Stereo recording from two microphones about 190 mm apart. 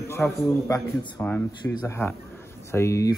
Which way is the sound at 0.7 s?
15° left (ahead or behind).